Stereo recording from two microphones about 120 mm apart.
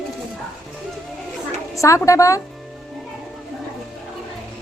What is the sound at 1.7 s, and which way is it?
Speech, 25° left (ahead or behind).